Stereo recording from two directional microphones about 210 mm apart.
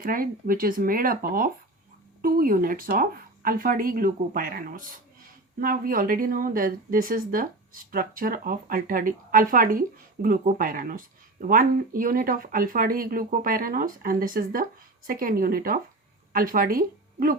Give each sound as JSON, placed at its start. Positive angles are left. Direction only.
{"t": 0.0, "sound": "speech", "side_deg": -45}